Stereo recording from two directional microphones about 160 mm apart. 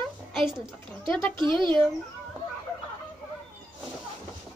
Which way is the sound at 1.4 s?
30° right (ahead or behind).